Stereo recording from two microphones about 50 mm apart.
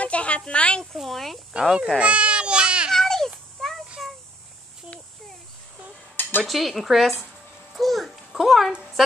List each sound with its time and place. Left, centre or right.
0.0 s a sound: left
0.5 s speech: left
0.9 s speech: centre
1.5 s speech: centre
2.0 s baby cry: right
2.9 s a sound: centre
6.4 s a child's voice: centre